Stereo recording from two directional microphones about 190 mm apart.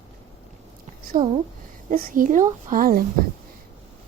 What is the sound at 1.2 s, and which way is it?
Speech, 25° right (ahead or behind).